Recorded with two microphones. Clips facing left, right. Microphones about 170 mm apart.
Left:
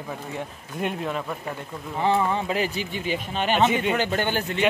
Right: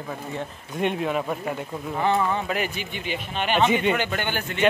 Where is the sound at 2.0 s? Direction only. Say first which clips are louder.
Left 1 dB; 25° left (ahead or behind).